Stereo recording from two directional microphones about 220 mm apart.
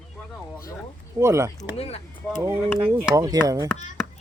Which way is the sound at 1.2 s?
10° right (ahead or behind).